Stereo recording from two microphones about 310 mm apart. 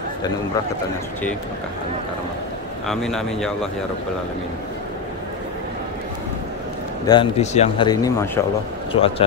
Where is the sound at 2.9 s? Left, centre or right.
Centre.